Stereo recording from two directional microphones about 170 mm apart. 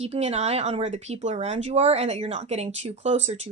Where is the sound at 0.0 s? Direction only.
40° right (ahead or behind).